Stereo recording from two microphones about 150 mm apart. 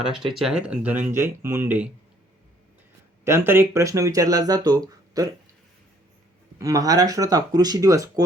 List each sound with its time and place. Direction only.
0.3 s speech: 5° right (ahead or behind)
3.2 s speech: 15° right (ahead or behind)
6.6 s speech: 25° right (ahead or behind)